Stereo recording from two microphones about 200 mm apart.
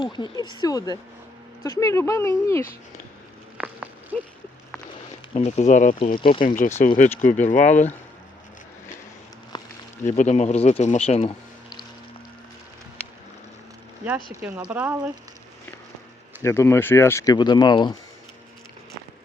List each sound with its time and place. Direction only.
0.0 s speech: 20° left (ahead or behind)
4.1 s a sound: 5° left (ahead or behind)
5.3 s speech: 35° left (ahead or behind)
6.1 s speech: 25° left (ahead or behind)
6.4 s speech: 40° left (ahead or behind)
10.1 s speech: 35° left (ahead or behind)
14.3 s speech: 10° right (ahead or behind)
16.4 s speech: 15° left (ahead or behind)